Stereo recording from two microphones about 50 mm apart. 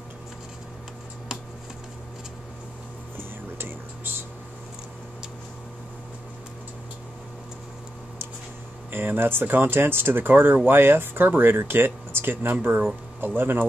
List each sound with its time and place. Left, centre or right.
3.2 s music: right
8.9 s speech: right